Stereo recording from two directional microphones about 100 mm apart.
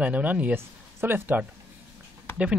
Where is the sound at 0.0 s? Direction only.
15° right (ahead or behind).